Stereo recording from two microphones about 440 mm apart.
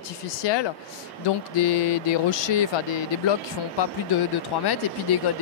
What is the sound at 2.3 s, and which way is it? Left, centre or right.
Speech, left.